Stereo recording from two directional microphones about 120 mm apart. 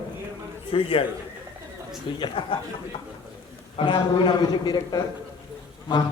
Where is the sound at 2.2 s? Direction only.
45° left (ahead or behind).